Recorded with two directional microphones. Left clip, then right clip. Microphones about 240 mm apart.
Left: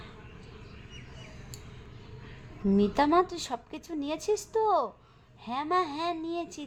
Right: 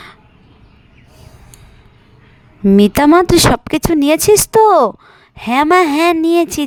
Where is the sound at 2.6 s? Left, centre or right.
Right.